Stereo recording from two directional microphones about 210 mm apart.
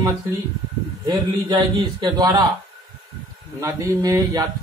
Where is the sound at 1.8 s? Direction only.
20° right (ahead or behind).